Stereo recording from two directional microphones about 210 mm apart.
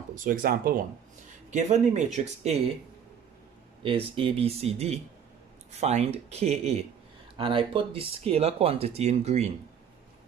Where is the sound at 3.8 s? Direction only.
25° right (ahead or behind).